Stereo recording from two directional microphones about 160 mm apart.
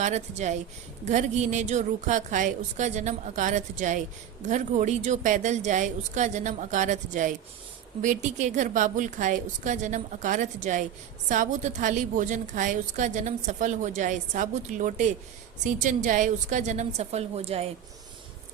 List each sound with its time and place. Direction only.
0.0 s a woman's voice: 45° right (ahead or behind)